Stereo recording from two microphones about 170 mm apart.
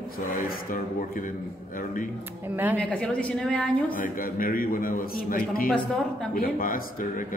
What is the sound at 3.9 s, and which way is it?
A man's voice, 55° left (ahead or behind).